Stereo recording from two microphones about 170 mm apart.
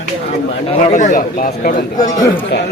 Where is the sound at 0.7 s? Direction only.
45° left (ahead or behind).